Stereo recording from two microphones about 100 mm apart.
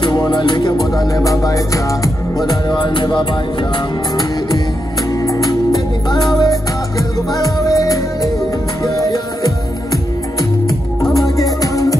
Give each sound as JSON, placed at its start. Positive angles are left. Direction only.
{"t": 0.0, "sound": "music", "side_deg": 45}
{"t": 5.2, "sound": "music", "side_deg": 35}
{"t": 6.0, "sound": "music", "side_deg": 45}
{"t": 11.0, "sound": "music", "side_deg": 35}